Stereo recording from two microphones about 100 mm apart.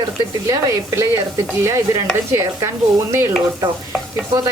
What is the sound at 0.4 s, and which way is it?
A woman's voice, 30° right (ahead or behind).